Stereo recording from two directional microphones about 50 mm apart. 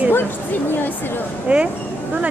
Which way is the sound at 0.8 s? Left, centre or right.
Left.